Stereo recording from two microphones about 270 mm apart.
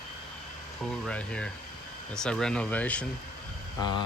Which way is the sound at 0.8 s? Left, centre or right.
Centre.